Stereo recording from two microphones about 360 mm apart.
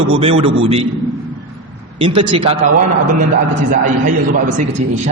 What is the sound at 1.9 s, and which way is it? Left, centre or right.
Speech, centre.